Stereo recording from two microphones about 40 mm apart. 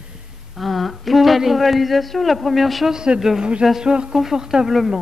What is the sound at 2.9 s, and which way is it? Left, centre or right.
Speech, centre.